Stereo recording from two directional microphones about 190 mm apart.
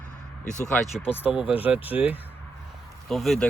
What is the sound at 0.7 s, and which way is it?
Speech, centre (ahead or behind).